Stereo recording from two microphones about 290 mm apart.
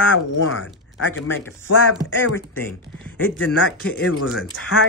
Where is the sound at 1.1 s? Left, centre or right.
Centre.